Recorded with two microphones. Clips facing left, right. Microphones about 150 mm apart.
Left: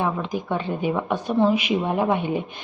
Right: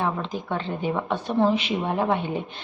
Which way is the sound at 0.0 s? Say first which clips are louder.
Left 2 dB; 15° left (ahead or behind).